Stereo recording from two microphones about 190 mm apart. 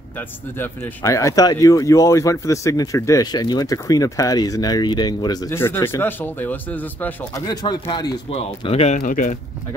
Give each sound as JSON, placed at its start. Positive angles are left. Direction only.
{"t": 0.6, "sound": "speech", "side_deg": 15}
{"t": 7.4, "sound": "speech", "side_deg": 20}